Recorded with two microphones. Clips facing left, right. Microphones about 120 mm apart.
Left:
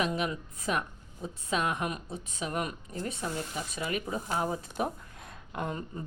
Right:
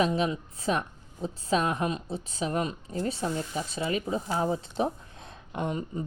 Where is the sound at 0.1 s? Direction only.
25° right (ahead or behind).